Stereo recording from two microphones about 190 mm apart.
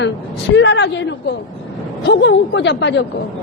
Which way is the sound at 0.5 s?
70° left (ahead or behind).